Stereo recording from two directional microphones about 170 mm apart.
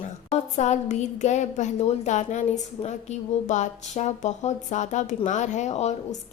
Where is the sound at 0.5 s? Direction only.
45° left (ahead or behind).